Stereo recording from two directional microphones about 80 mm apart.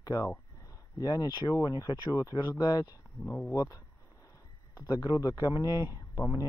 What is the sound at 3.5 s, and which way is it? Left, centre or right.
Speech, left.